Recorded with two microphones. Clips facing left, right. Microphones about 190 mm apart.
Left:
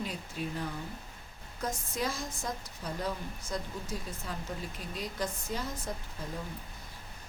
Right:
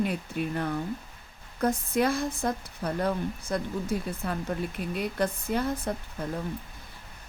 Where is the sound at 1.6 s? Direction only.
60° right (ahead or behind).